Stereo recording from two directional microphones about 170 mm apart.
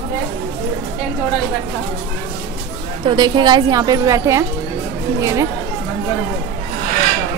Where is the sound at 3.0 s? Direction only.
25° right (ahead or behind).